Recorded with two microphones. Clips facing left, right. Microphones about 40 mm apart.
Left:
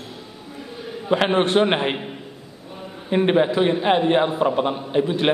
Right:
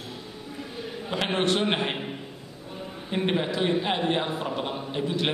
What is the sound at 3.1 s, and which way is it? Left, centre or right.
A man's voice, left.